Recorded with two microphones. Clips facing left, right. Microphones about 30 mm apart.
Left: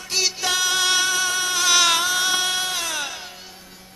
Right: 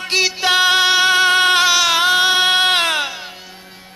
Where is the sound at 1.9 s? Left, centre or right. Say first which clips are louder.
Right 7 dB; right.